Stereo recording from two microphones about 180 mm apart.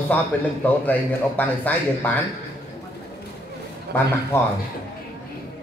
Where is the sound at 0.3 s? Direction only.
5° left (ahead or behind).